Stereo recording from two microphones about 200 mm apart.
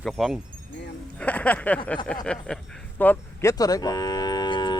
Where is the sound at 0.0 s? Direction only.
Centre (ahead or behind).